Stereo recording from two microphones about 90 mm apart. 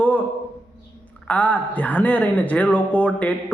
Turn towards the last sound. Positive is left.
turn(degrees=15)  # may be behind; listen again after turning